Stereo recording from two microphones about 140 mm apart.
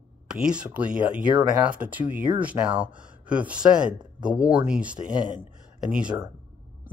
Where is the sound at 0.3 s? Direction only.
5° right (ahead or behind).